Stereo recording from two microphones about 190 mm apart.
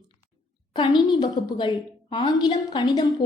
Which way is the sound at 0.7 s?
25° left (ahead or behind).